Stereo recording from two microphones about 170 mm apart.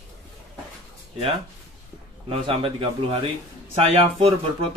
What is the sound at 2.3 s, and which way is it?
Speech, 30° right (ahead or behind).